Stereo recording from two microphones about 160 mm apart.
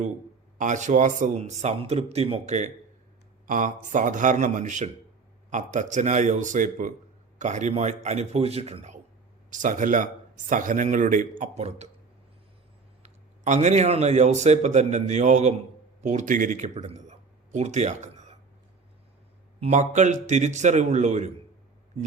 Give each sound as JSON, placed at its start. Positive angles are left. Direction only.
{"t": 0.6, "sound": "a man's voice", "side_deg": -50}
{"t": 3.4, "sound": "a man's voice", "side_deg": -55}
{"t": 13.0, "sound": "a man's voice", "side_deg": -45}
{"t": 19.5, "sound": "a man's voice", "side_deg": -45}